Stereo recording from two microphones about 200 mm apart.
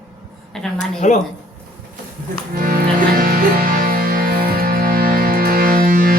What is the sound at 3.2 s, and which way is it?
Music, 45° right (ahead or behind).